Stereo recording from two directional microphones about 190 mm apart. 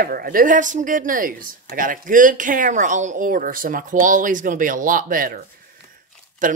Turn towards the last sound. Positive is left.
turn(degrees=-45)  # may be behind; listen again after turning